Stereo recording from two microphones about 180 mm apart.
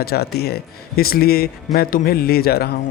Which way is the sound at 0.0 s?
60° left (ahead or behind).